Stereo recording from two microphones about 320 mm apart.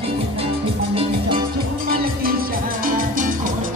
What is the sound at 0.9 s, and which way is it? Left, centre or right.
Music, centre.